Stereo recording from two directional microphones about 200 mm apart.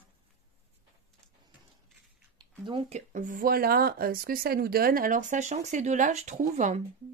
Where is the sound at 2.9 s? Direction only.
40° right (ahead or behind).